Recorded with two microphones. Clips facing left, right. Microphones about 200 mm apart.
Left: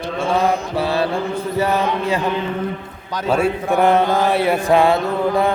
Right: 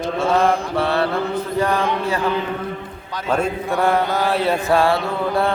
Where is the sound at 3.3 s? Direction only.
15° left (ahead or behind).